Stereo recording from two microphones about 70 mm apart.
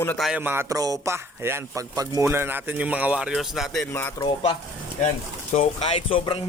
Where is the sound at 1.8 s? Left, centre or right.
Right.